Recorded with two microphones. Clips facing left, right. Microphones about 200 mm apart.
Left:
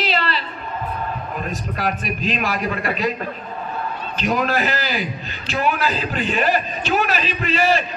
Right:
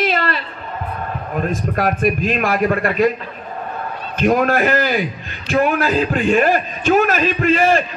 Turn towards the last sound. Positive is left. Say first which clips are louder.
# right 5 dB
turn(degrees=-50)  # may be behind; listen again after turning